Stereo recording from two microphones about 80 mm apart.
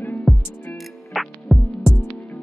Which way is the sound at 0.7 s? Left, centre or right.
Centre.